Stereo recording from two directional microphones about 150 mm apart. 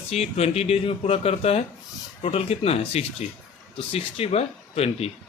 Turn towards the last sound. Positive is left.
turn(degrees=40)  # may be behind; listen again after turning